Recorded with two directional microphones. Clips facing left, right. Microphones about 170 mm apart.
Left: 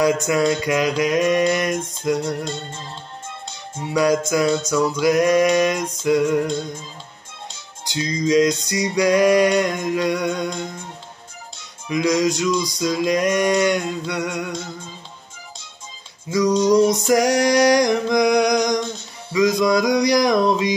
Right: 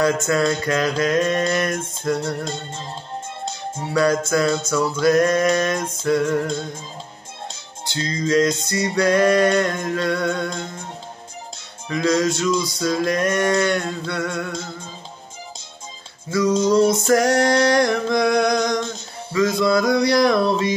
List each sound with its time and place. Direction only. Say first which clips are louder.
0.0 s music: left 1 dB; 15° left (ahead or behind)
3.9 s music: left 1 dB; 15° left (ahead or behind)
7.9 s music: left 2 dB; 15° left (ahead or behind)
11.9 s music: left 1 dB; 15° left (ahead or behind)
16.3 s music: left 1 dB; 15° left (ahead or behind)